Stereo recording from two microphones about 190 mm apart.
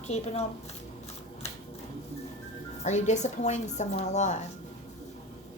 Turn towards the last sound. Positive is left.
turn(degrees=40)  # may be behind; listen again after turning